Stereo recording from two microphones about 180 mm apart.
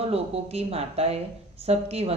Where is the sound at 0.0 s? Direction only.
35° right (ahead or behind).